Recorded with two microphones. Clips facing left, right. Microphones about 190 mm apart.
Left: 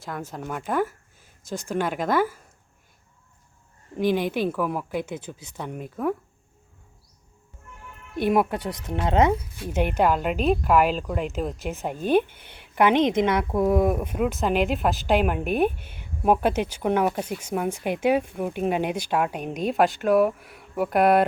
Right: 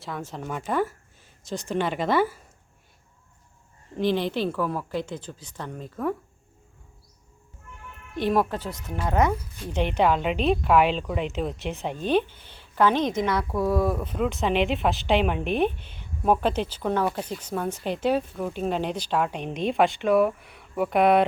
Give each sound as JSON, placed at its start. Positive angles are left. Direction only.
{"t": 0.0, "sound": "speech", "side_deg": 0}
{"t": 3.9, "sound": "a woman's voice", "side_deg": 10}
{"t": 8.1, "sound": "a woman's voice", "side_deg": 10}
{"t": 9.6, "sound": "a woman's voice", "side_deg": 5}